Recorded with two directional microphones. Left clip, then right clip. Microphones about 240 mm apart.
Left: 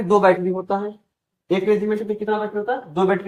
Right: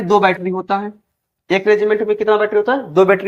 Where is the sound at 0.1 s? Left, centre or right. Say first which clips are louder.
Right 2 dB; right.